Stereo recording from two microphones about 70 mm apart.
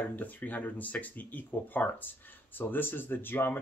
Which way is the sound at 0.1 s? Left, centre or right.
Left.